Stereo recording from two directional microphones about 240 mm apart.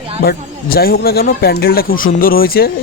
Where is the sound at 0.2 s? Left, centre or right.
Left.